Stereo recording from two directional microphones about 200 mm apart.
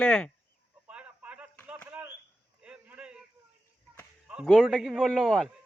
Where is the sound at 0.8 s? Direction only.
5° right (ahead or behind).